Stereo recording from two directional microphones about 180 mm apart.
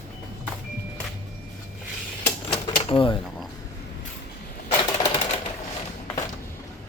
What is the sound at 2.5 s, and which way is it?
Cash register, 30° left (ahead or behind).